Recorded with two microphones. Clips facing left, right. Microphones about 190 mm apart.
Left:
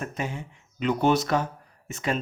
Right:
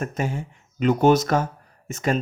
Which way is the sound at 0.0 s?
45° right (ahead or behind).